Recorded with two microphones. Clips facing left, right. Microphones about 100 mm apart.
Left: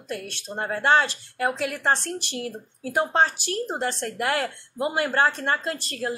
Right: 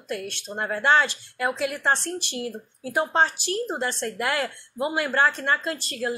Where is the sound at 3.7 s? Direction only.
45° left (ahead or behind).